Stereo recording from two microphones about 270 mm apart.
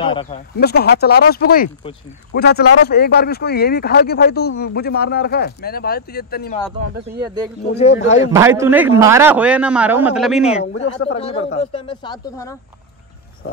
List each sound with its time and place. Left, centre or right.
0.0 s speech: centre
0.6 s speech: left
7.7 s speech: left
8.3 s a man's voice: centre
11.1 s speech: left